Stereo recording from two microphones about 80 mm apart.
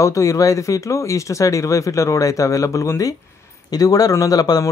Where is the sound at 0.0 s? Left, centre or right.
Left.